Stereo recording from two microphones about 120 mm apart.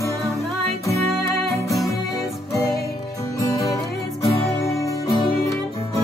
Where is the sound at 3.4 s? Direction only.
25° left (ahead or behind).